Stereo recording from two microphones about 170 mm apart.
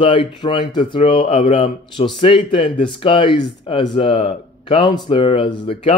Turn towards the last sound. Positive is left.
turn(degrees=30)  # may be behind; listen again after turning